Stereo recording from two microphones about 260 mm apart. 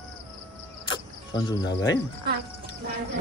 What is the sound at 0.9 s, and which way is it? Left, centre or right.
Cricket, centre.